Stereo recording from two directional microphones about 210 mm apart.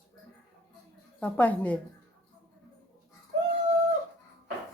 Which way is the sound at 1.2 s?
5° left (ahead or behind).